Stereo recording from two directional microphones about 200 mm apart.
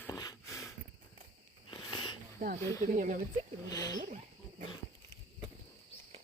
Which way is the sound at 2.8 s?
40° right (ahead or behind).